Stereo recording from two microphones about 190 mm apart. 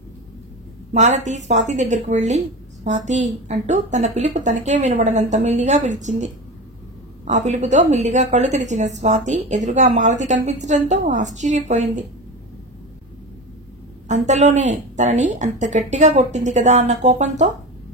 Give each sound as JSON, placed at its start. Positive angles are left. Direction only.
{"t": 0.9, "sound": "a woman's voice", "side_deg": -40}
{"t": 14.0, "sound": "a woman's voice", "side_deg": -40}